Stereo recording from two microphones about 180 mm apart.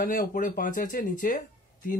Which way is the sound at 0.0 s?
50° left (ahead or behind).